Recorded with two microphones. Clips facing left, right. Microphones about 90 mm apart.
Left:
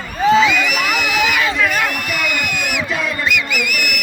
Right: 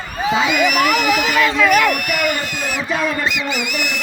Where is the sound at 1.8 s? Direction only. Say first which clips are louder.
Right 3 dB; 55° right (ahead or behind).